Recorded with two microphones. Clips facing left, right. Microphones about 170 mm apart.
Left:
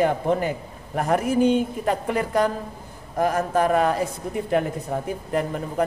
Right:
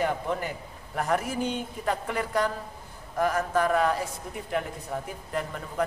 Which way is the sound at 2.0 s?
40° left (ahead or behind).